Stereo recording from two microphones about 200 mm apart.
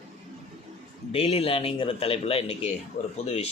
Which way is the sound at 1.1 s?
30° left (ahead or behind).